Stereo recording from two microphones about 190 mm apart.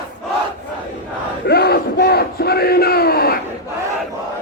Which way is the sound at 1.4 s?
60° left (ahead or behind).